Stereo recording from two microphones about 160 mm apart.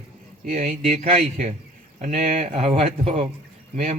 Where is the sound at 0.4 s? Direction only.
60° right (ahead or behind).